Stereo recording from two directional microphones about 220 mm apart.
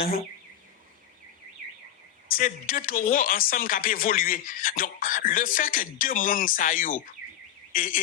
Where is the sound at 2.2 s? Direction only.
40° left (ahead or behind).